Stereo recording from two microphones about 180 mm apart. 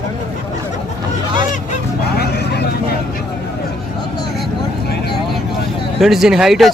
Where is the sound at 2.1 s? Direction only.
65° left (ahead or behind).